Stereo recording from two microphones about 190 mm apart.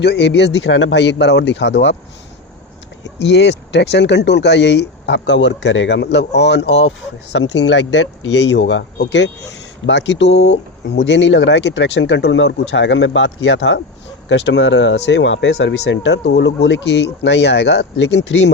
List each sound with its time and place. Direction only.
0.0 s speech: 60° left (ahead or behind)
3.2 s speech: 65° left (ahead or behind)